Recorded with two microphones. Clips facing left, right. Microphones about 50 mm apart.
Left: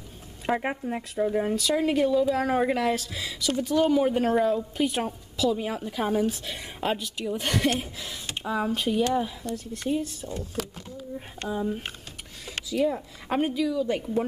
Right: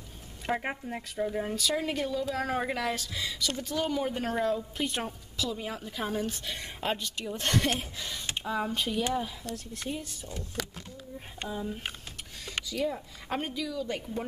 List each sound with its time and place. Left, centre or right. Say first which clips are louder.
0.5 s speech: left 5 dB; centre